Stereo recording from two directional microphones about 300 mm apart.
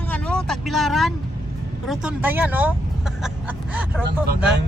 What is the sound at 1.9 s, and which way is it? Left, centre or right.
Speech, centre.